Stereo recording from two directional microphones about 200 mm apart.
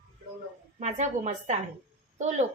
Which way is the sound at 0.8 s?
35° right (ahead or behind).